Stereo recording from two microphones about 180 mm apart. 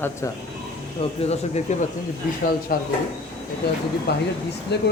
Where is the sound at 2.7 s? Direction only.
55° left (ahead or behind).